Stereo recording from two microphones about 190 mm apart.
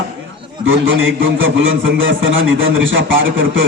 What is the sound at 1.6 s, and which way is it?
A man's voice, 90° right.